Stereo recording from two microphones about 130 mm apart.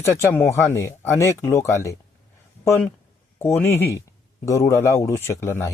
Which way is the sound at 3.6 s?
20° left (ahead or behind).